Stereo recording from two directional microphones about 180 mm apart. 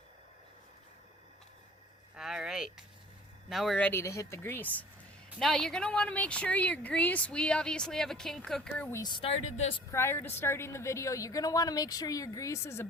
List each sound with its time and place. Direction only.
2.1 s a woman's voice: centre (ahead or behind)
8.9 s a woman's voice: 20° left (ahead or behind)
9.9 s a woman's voice: 15° left (ahead or behind)